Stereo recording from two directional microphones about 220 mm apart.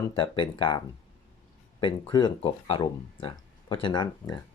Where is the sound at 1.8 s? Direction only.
20° left (ahead or behind).